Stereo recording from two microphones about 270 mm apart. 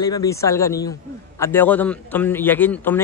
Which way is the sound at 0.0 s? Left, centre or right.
Centre.